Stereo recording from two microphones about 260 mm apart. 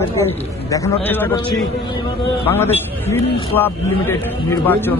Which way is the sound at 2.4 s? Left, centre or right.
Centre.